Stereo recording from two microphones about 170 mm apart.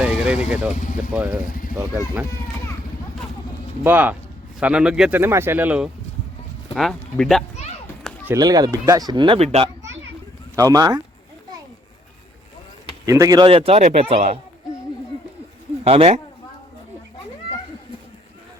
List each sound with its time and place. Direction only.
0.0 s vehicle: 5° right (ahead or behind)
0.5 s speech: 5° right (ahead or behind)
0.8 s speech: 50° left (ahead or behind)
1.1 s speech: 5° right (ahead or behind)
1.5 s speech: 55° left (ahead or behind)
3.8 s speech: 10° right (ahead or behind)
8.3 s speech: 20° right (ahead or behind)
10.5 s speech: 20° right (ahead or behind)
13.1 s speech: 20° right (ahead or behind)
13.5 s speech: 35° right (ahead or behind)
15.8 s speech: 35° right (ahead or behind)